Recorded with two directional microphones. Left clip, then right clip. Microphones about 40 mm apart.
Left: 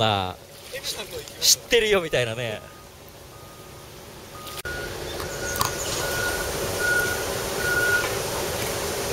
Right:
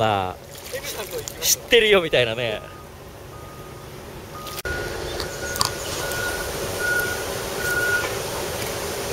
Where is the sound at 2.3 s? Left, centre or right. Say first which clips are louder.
Right 5 dB; left.